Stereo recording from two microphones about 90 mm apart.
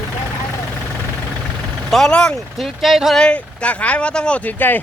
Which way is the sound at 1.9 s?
10° left (ahead or behind).